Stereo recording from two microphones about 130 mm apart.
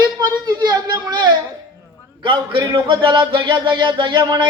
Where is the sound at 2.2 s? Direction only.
40° right (ahead or behind).